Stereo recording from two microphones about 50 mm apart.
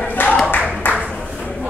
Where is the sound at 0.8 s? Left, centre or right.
Left.